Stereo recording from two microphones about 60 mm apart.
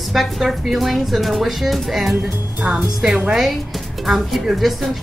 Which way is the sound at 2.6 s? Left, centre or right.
Centre.